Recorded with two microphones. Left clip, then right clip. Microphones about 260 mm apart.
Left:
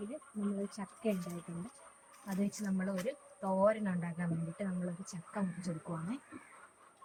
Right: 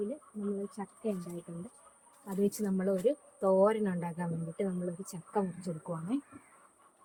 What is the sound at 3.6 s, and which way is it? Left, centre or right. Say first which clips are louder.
Speech: right 3 dB; right.